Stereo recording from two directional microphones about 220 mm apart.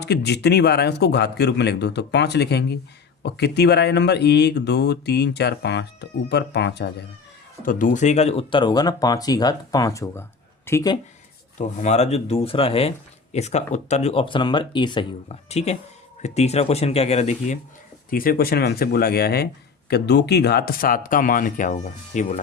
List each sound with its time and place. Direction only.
0.0 s speech: 50° left (ahead or behind)
7.6 s speech: 35° left (ahead or behind); by 11.0 s 15° left (ahead or behind)
11.5 s speech: 35° left (ahead or behind)
18.1 s speech: 40° left (ahead or behind)